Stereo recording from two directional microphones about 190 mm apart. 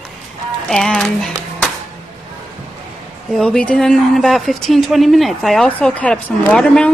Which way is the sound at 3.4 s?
5° left (ahead or behind).